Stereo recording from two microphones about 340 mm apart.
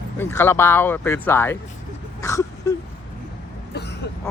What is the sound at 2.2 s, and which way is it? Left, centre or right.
Wail, centre.